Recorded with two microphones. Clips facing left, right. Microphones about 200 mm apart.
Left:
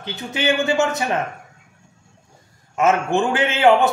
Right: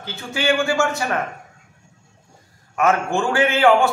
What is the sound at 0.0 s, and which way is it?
A man's voice, 20° left (ahead or behind).